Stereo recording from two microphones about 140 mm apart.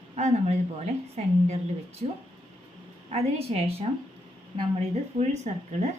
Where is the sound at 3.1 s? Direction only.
45° right (ahead or behind).